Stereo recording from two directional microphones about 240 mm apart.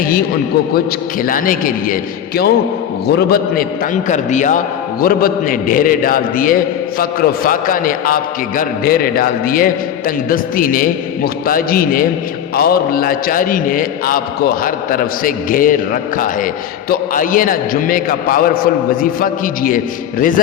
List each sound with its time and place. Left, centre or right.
1.2 s a man's voice: left